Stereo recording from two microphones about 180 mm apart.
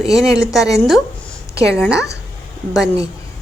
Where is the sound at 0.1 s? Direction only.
Centre (ahead or behind).